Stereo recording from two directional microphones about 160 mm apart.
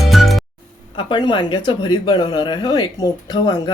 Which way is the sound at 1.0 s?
30° left (ahead or behind).